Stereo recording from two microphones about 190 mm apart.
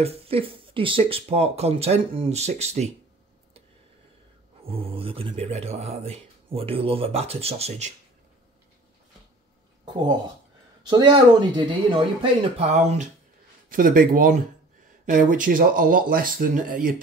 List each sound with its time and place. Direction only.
0.0 s speech: 30° right (ahead or behind)
4.6 s speech: 30° right (ahead or behind)
10.9 s speech: 25° right (ahead or behind)
12.2 s speech: 35° right (ahead or behind)